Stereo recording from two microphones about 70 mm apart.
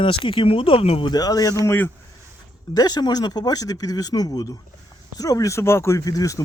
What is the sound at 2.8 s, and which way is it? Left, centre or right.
Speech, left.